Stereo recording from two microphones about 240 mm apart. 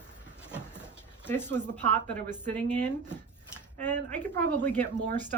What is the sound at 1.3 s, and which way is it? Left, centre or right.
Speech, centre.